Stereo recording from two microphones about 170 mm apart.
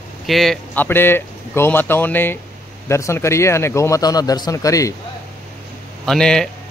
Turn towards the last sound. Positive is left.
turn(degrees=5)  # may be behind; listen again after turning